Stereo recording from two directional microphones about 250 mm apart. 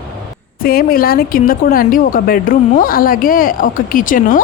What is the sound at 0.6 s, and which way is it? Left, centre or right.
A woman's voice, left.